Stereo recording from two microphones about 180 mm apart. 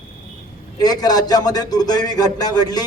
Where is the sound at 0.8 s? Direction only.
20° left (ahead or behind).